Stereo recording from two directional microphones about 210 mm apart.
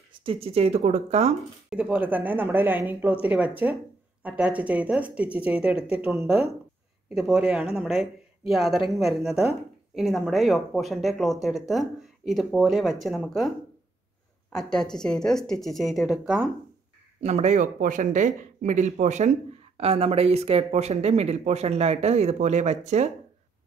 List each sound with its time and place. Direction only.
0.2 s speech: 25° right (ahead or behind)
1.7 s speech: 5° right (ahead or behind)
14.5 s speech: 5° left (ahead or behind)
17.2 s speech: 30° right (ahead or behind)